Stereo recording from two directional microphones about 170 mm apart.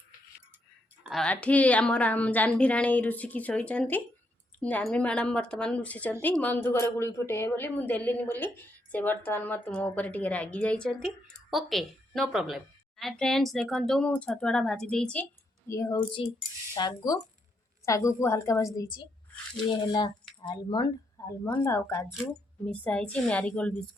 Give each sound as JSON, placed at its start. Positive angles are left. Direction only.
{"t": 1.1, "sound": "a woman's voice", "side_deg": 5}
{"t": 15.7, "sound": "a woman's voice", "side_deg": 20}